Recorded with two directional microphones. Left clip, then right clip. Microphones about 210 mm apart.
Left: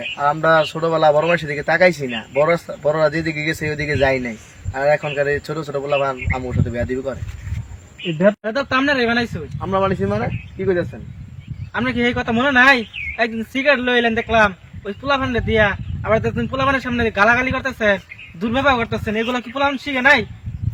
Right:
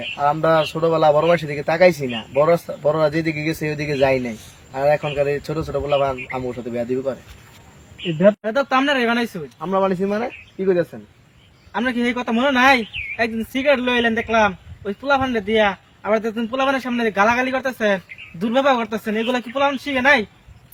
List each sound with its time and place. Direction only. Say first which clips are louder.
0.2 s a man's voice: left 2 dB; centre (ahead or behind)
8.4 s a man's voice: even; 10° right (ahead or behind)
9.6 s speech: even; 5° left (ahead or behind)
11.7 s a man's voice: left 1 dB; 15° right (ahead or behind)
12.0 s a man's voice: left 3 dB; centre (ahead or behind)